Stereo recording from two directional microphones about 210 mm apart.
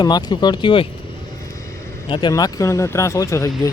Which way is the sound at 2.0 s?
20° left (ahead or behind).